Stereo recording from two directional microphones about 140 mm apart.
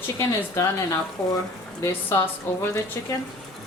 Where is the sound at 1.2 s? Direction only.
10° left (ahead or behind).